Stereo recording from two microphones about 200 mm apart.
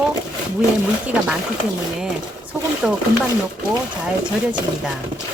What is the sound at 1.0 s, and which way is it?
Speech, 5° right (ahead or behind).